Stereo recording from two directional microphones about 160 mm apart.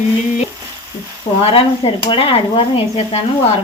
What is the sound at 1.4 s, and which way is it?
Speech, 35° left (ahead or behind).